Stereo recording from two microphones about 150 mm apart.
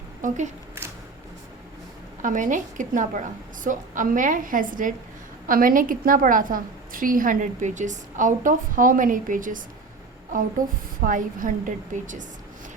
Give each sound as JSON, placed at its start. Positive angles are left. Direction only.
{"t": 0.2, "sound": "a woman's voice", "side_deg": -55}
{"t": 2.2, "sound": "a woman's voice", "side_deg": -60}